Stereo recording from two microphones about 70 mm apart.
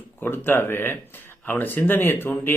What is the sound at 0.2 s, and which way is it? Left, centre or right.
Speech, left.